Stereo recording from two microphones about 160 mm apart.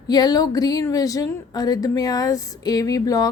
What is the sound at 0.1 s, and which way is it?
Speech, 25° left (ahead or behind).